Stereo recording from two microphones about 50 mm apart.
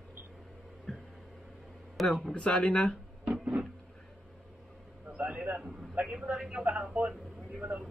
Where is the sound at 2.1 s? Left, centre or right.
Centre.